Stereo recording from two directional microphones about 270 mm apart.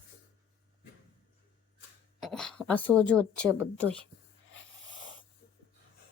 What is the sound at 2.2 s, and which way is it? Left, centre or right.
Speech, centre.